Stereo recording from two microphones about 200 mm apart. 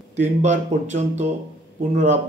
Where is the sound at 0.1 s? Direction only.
35° right (ahead or behind).